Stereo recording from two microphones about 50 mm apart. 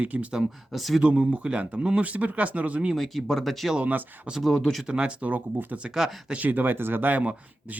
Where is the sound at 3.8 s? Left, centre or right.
Right.